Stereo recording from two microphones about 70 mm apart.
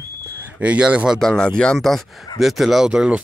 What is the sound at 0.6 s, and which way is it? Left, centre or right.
Speech, centre.